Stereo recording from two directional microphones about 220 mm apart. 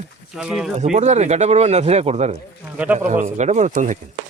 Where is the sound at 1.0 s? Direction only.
30° right (ahead or behind).